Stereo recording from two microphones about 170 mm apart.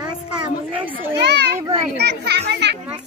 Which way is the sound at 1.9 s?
75° right (ahead or behind).